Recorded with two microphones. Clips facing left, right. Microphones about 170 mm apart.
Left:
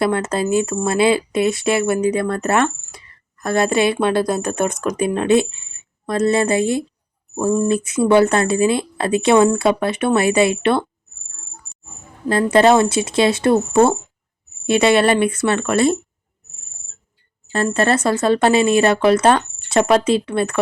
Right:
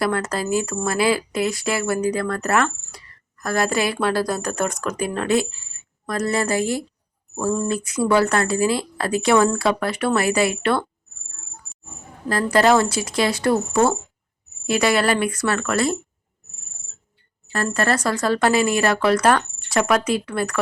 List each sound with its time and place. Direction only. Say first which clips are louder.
0.0 s speech: left 4 dB; 25° left (ahead or behind)
12.3 s speech: left 4 dB; 25° left (ahead or behind)
17.5 s speech: left 4 dB; 25° left (ahead or behind)